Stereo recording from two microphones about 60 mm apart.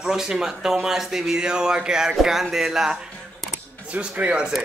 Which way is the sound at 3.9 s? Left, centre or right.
Right.